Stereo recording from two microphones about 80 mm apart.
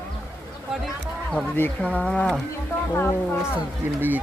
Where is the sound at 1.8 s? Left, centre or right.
Centre.